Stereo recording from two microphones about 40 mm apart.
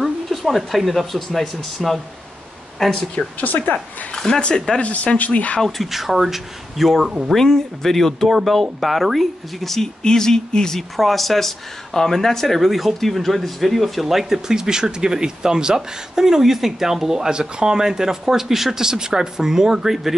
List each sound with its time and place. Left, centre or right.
0.0 s a sound: centre
1.1 s speech: centre
1.8 s speech: centre
2.8 s speech: centre
3.3 s a woman's voice: left
4.3 s speech: left
5.6 s speech: centre
7.3 s speech: centre
11.0 s speech: centre